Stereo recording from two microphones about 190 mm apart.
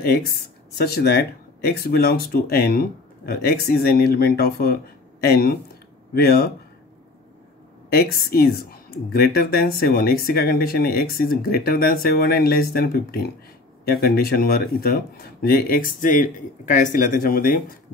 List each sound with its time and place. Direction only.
0.0 s speech: 55° left (ahead or behind)
7.9 s speech: 55° left (ahead or behind)